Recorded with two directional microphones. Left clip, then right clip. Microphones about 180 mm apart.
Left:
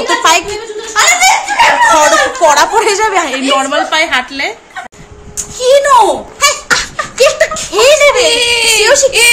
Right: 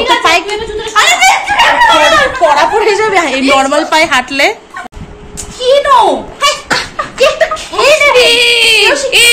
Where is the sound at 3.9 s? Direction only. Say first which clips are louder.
Right 3 dB; 20° right (ahead or behind).